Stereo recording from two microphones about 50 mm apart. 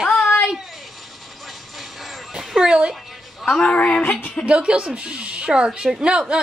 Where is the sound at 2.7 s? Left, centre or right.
Centre.